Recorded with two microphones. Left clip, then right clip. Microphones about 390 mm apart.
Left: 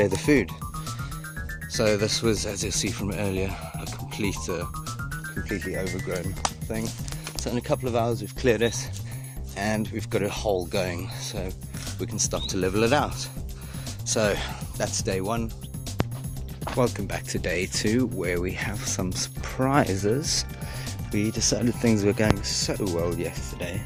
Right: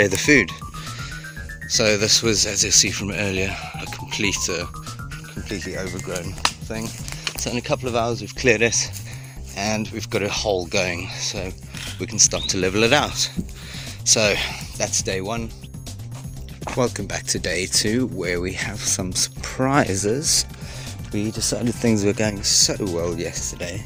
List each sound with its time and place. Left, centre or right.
0.0 s mechanisms: left
1.7 s mechanisms: left
5.5 s speech: left
7.4 s mechanisms: left
14.1 s speech: left
15.0 s speech: left
16.6 s mechanisms: left
21.1 s speech: left
21.9 s mechanisms: left